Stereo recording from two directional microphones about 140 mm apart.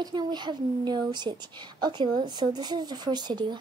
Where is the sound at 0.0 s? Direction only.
30° right (ahead or behind).